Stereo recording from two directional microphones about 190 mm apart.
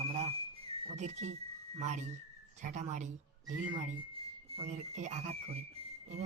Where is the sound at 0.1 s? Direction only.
35° right (ahead or behind).